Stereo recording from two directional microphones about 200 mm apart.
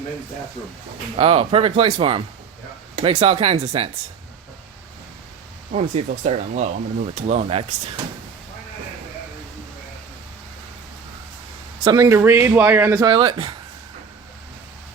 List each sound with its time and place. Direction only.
1.2 s speech: 30° right (ahead or behind)
5.7 s speech: 35° right (ahead or behind)
11.8 s a man's voice: 20° right (ahead or behind)